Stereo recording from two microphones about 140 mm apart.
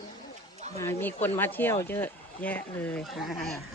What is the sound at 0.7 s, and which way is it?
Speech, 15° left (ahead or behind).